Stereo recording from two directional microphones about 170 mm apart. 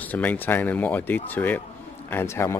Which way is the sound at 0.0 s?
10° left (ahead or behind).